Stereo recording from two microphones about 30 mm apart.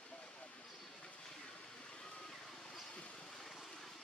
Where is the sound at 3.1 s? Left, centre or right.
Centre.